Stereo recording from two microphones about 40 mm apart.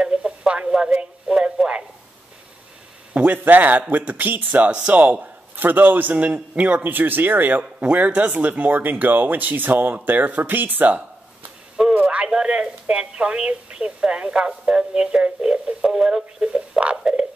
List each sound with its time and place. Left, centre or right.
0.0 s a sound: right
1.3 s radio: right
3.1 s a sound: right
3.3 s speech: right
4.5 s speech: right
5.2 s a man's voice: right
6.1 s speech: right
6.8 s speech: right
7.8 s speech: right
11.8 s radio: centre
12.3 s a sound: right
13.7 s a woman's voice: right